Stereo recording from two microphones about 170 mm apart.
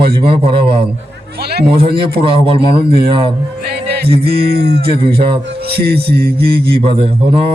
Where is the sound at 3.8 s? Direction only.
75° right (ahead or behind).